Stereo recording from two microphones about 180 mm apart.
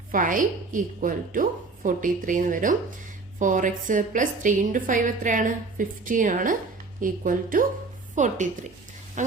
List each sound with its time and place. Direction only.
0.1 s a woman's voice: 45° right (ahead or behind)